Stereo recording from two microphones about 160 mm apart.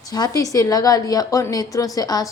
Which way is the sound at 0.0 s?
25° left (ahead or behind).